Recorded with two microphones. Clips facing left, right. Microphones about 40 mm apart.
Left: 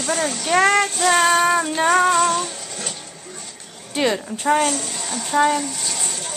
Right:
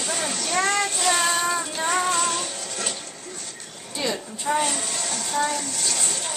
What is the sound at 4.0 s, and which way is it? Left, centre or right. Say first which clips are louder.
Child singing: left 7 dB; left.